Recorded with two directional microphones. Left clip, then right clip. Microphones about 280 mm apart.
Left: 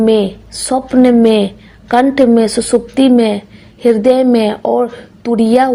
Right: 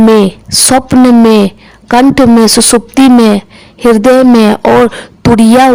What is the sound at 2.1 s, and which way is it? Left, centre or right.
A woman's voice, right.